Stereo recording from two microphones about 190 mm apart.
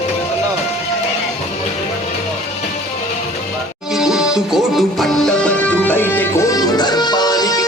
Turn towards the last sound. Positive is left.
turn(degrees=20)  # may be behind; listen again after turning